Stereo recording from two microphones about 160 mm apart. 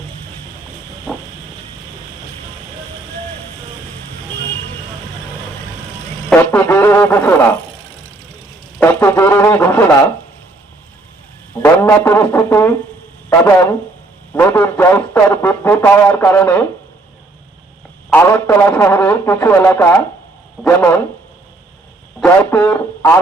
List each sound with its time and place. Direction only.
6.3 s a sound: 10° left (ahead or behind)
8.8 s speech: 10° left (ahead or behind)
11.6 s speech: 15° left (ahead or behind)
18.1 s speech: 15° left (ahead or behind)
22.4 s speech: 10° left (ahead or behind)